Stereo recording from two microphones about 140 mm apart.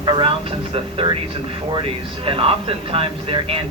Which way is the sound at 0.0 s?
35° right (ahead or behind).